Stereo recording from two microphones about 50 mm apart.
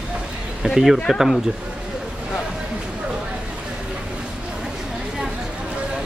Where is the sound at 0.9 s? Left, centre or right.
Centre.